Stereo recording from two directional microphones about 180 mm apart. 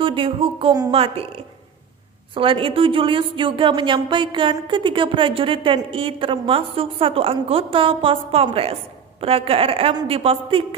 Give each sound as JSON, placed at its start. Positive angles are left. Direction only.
{"t": 0.0, "sound": "a woman's voice", "side_deg": -30}